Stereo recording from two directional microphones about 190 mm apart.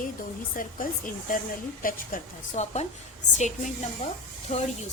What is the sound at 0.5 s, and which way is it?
A woman's voice, 45° left (ahead or behind).